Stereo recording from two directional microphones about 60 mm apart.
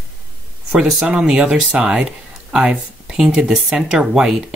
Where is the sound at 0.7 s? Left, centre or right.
Centre.